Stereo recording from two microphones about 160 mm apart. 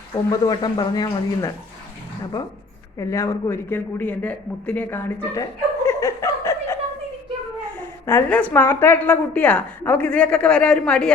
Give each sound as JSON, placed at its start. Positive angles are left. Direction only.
{"t": 0.3, "sound": "speech", "side_deg": 25}
{"t": 3.0, "sound": "a man's voice", "side_deg": 20}
{"t": 7.8, "sound": "a woman's voice", "side_deg": 15}